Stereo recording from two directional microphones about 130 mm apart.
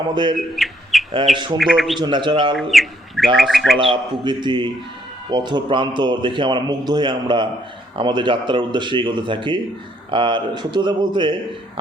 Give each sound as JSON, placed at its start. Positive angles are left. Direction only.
{"t": 0.1, "sound": "a man's voice", "side_deg": -40}
{"t": 0.3, "sound": "speech", "side_deg": 0}
{"t": 2.0, "sound": "a man's voice", "side_deg": -40}
{"t": 2.6, "sound": "speech", "side_deg": 0}
{"t": 3.8, "sound": "a man's voice", "side_deg": -40}